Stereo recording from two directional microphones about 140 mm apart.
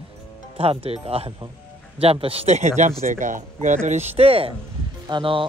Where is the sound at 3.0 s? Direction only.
70° right (ahead or behind).